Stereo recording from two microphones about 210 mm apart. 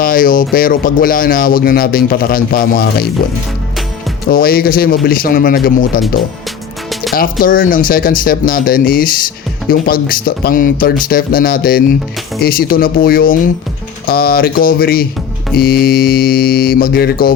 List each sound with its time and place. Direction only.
0.0 s speech: 40° left (ahead or behind)
4.3 s speech: 45° left (ahead or behind)
7.1 s speech: 40° left (ahead or behind)